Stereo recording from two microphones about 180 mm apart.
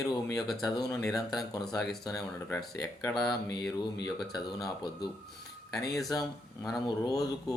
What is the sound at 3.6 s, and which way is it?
Speech, 5° left (ahead or behind).